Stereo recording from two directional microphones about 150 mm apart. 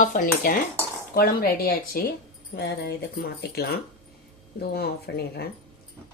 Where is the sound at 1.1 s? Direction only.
85° left.